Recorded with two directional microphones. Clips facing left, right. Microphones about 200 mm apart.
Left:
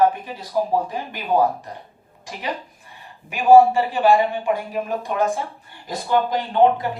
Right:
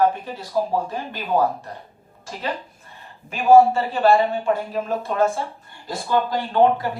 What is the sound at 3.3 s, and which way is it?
A woman's voice, 15° left (ahead or behind).